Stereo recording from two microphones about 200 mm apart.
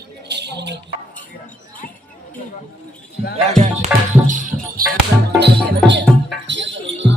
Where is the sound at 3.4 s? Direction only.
35° right (ahead or behind).